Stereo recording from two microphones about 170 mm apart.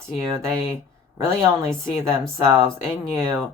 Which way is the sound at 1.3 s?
15° right (ahead or behind).